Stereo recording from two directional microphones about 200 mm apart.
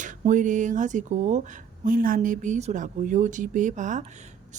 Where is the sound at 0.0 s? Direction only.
40° right (ahead or behind).